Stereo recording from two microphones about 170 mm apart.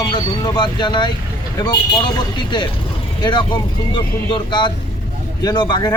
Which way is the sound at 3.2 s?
25° left (ahead or behind).